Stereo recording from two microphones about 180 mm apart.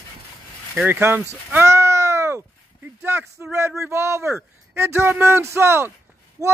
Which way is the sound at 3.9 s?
15° right (ahead or behind).